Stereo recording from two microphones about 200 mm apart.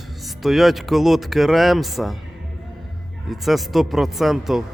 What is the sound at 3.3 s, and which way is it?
Speech, centre (ahead or behind).